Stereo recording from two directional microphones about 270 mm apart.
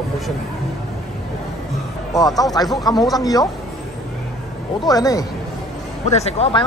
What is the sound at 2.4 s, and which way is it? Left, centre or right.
Speech, centre.